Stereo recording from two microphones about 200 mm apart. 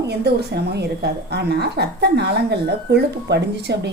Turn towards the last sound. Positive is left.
turn(degrees=-55)  # may be behind; listen again after turning